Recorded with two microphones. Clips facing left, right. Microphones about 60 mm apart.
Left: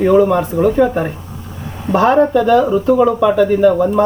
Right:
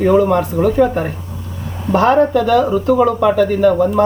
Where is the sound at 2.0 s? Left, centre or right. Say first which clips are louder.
Left 1 dB; left; by 4.0 s centre.